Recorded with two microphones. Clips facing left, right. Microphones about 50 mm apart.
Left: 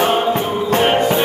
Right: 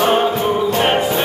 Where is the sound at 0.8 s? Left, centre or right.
Centre.